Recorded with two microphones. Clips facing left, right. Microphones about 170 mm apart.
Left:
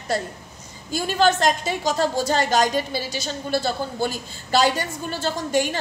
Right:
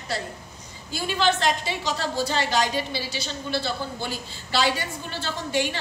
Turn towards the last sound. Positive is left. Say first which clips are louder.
# left 4 dB
turn(degrees=45)  # may be behind; listen again after turning